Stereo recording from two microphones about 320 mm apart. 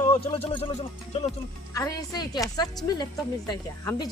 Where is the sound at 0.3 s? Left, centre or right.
Centre.